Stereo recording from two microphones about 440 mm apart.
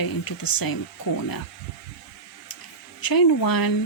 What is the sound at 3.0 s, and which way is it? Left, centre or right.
Speech, left.